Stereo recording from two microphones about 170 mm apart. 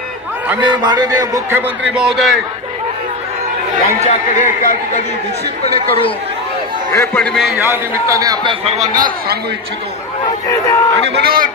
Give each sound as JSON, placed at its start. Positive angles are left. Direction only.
{"t": 0.6, "sound": "a man's voice", "side_deg": -25}
{"t": 1.9, "sound": "a man's voice", "side_deg": -5}
{"t": 4.0, "sound": "speech", "side_deg": 45}
{"t": 5.6, "sound": "speech", "side_deg": 35}
{"t": 6.9, "sound": "a man's voice", "side_deg": 10}
{"t": 7.7, "sound": "a man's voice", "side_deg": -20}
{"t": 8.9, "sound": "a man's voice", "side_deg": -55}
{"t": 10.5, "sound": "a man's voice", "side_deg": 15}
{"t": 11.1, "sound": "a man's voice", "side_deg": -60}